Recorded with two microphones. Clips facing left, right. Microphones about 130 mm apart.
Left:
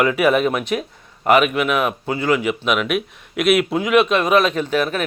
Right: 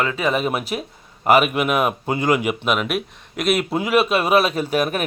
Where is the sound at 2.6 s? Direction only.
Centre (ahead or behind).